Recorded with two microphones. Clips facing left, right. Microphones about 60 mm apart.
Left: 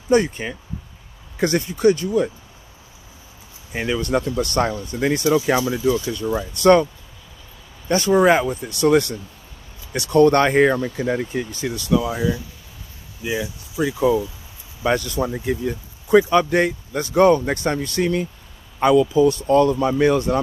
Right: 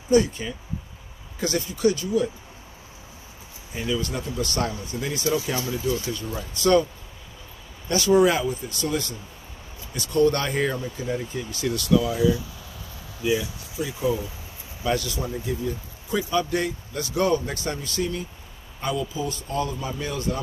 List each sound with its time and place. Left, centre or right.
0.1 s speech: left
3.7 s speech: left
4.6 s speech: left
7.9 s speech: left
11.6 s speech: left
13.2 s speech: left
13.7 s speech: left
14.8 s speech: left
17.7 s speech: left